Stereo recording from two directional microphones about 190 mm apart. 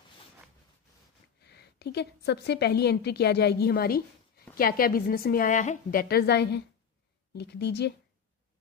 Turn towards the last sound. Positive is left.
turn(degrees=60)  # may be behind; listen again after turning